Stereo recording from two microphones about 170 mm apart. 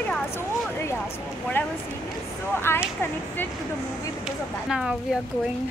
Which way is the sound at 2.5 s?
15° left (ahead or behind).